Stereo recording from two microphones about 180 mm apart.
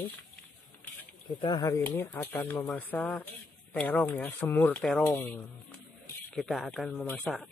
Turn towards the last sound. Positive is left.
turn(degrees=5)  # may be behind; listen again after turning